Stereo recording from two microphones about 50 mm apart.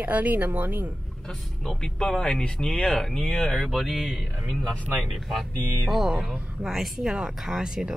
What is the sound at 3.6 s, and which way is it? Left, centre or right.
Speech, centre.